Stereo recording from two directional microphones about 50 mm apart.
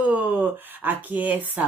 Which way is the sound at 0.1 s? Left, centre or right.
Right.